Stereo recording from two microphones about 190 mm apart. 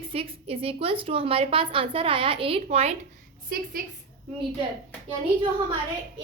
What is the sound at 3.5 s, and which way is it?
Speech, 50° right (ahead or behind).